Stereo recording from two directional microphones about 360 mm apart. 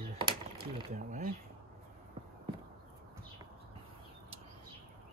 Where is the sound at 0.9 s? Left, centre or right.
Right.